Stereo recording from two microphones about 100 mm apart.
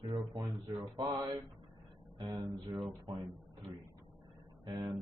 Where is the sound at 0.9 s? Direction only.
45° right (ahead or behind).